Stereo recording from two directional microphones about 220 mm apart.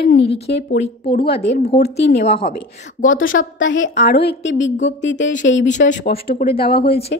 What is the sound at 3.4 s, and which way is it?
Speech, 60° left (ahead or behind).